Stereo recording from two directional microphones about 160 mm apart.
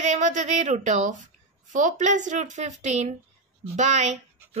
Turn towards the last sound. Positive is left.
turn(degrees=-45)  # may be behind; listen again after turning